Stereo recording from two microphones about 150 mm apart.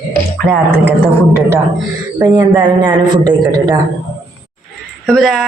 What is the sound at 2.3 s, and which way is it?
A man's voice, 25° right (ahead or behind).